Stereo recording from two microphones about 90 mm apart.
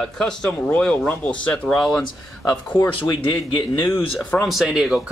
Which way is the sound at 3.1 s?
60° left (ahead or behind).